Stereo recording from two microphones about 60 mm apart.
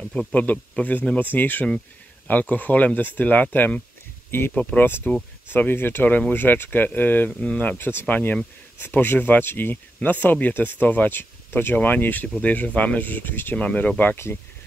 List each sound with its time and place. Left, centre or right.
0.3 s speech: left
4.6 s speech: left
7.2 s speech: centre
7.5 s speech: left
14.1 s speech: left